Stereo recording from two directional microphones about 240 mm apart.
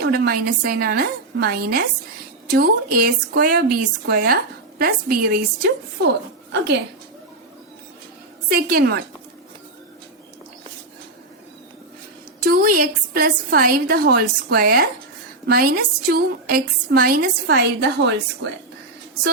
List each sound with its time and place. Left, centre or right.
0.0 s a woman's voice: right
8.4 s a woman's voice: right
12.5 s a woman's voice: right